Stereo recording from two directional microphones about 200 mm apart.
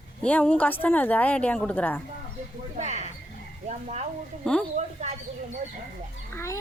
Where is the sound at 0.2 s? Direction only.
5° left (ahead or behind).